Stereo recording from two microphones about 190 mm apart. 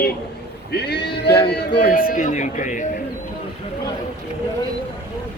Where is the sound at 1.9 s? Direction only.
50° left (ahead or behind).